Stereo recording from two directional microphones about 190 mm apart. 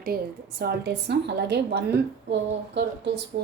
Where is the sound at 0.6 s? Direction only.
60° right (ahead or behind).